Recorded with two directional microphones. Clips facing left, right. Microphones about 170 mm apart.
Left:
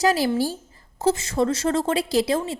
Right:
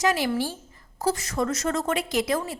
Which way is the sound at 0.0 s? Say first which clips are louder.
Left 4 dB; 35° left (ahead or behind).